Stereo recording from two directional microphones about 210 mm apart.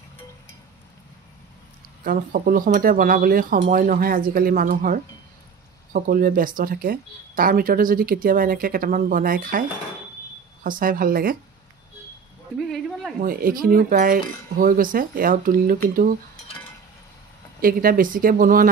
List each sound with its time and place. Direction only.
2.0 s speech: 40° right (ahead or behind)
12.5 s a sound: centre (ahead or behind)
13.2 s speech: 45° right (ahead or behind)
17.6 s speech: 45° right (ahead or behind)